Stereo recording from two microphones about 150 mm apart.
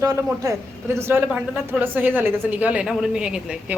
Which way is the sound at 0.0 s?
20° right (ahead or behind).